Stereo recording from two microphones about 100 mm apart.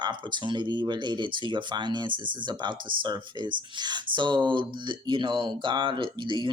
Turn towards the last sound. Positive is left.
turn(degrees=-55)  # may be behind; listen again after turning